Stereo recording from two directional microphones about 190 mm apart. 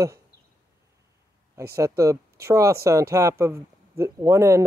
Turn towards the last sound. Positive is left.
turn(degrees=-15)  # may be behind; listen again after turning